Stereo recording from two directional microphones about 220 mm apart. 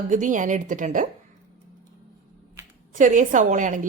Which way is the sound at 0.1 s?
35° right (ahead or behind).